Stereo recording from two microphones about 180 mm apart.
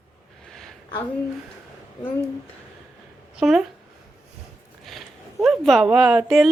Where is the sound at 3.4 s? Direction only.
Centre (ahead or behind).